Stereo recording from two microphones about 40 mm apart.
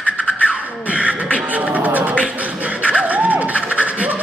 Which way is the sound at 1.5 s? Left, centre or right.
Right.